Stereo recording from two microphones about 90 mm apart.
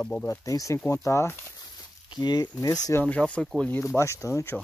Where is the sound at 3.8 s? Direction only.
30° left (ahead or behind).